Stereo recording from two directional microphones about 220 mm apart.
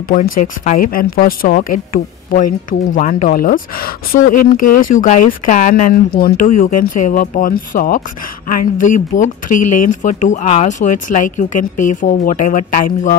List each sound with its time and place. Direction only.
0.1 s speech: 35° left (ahead or behind)